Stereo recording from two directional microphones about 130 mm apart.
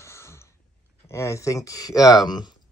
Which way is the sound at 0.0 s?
20° left (ahead or behind).